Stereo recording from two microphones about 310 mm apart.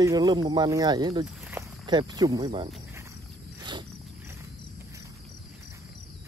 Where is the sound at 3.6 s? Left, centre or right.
Centre.